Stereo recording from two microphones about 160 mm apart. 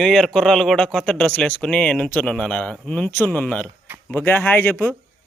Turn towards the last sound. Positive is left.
turn(degrees=15)  # may be behind; listen again after turning